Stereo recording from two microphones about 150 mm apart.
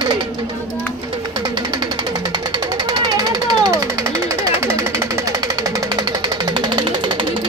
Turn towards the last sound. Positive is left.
turn(degrees=-30)  # may be behind; listen again after turning